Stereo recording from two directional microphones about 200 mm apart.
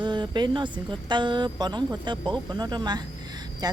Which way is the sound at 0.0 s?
20° right (ahead or behind).